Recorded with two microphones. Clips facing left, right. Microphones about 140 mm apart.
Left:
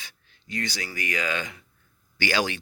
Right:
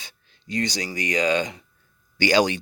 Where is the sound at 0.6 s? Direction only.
20° right (ahead or behind).